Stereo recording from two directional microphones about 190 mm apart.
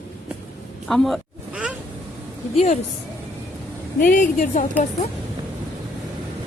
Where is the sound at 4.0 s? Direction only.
45° left (ahead or behind).